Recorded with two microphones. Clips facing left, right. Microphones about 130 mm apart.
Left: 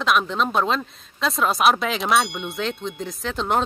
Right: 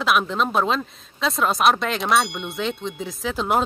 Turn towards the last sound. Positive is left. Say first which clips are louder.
# right 1 dB
turn(degrees=-5)  # may be behind; listen again after turning